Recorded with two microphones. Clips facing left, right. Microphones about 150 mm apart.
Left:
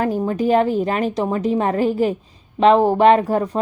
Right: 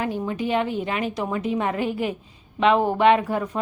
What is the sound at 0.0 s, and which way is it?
Speech, 40° left (ahead or behind).